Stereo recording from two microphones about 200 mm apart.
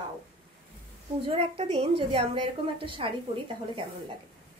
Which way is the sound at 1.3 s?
30° right (ahead or behind).